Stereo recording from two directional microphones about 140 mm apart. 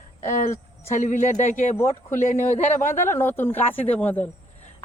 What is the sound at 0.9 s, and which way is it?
A man's voice, 65° left (ahead or behind).